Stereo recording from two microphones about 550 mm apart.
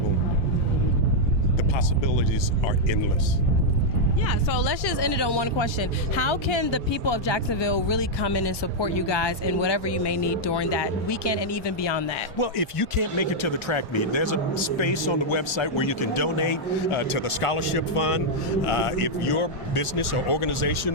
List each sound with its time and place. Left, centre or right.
4.3 s speech: left
12.5 s speech: left